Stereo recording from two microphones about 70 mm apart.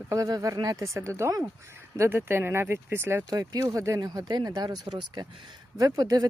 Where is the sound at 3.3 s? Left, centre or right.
Right.